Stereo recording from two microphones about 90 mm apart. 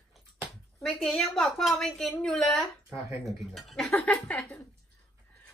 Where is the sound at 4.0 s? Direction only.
15° left (ahead or behind).